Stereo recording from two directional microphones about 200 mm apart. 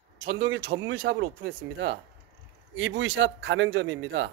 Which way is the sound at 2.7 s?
70° right (ahead or behind).